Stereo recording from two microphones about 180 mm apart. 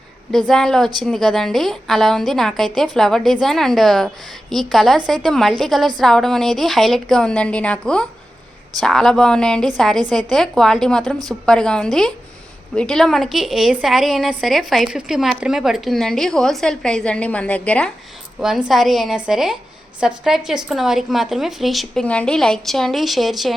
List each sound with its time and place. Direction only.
0.3 s a woman's voice: centre (ahead or behind)